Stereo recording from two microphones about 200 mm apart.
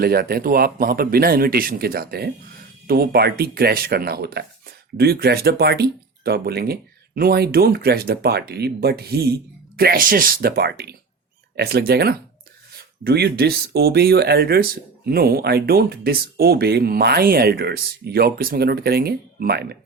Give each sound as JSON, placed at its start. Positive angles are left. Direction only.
{"t": 0.0, "sound": "speech", "side_deg": -50}